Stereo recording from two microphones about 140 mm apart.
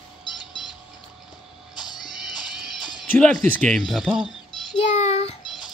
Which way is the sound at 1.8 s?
30° left (ahead or behind).